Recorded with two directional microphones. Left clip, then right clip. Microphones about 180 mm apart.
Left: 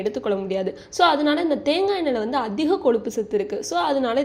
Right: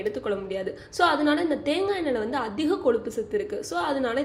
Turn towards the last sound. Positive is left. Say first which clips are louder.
# left 5 dB
turn(degrees=25)  # may be behind; listen again after turning